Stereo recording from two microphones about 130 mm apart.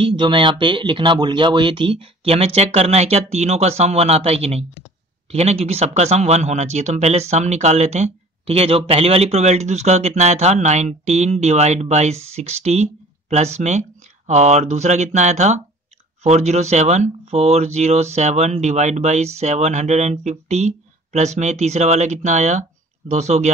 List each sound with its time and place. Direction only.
0.0 s speech: 40° right (ahead or behind); by 23.5 s 60° right (ahead or behind)